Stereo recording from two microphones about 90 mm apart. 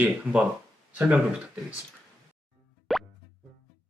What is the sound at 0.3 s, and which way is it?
Speech, 20° right (ahead or behind).